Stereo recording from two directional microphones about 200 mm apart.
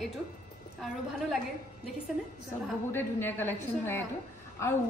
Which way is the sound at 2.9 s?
10° left (ahead or behind).